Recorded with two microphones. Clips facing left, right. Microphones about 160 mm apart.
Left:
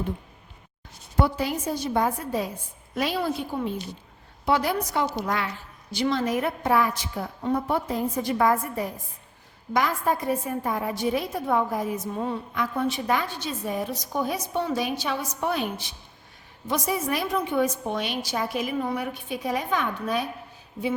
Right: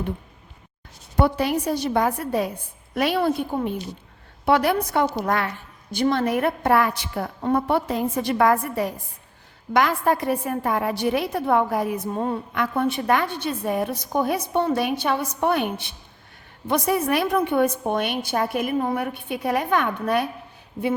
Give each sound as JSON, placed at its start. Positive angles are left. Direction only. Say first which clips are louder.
{"t": 1.2, "sound": "a woman's voice", "louder": "right 4 dB", "side_deg": -65}
{"t": 12.5, "sound": "a woman's voice", "louder": "right 3 dB", "side_deg": -60}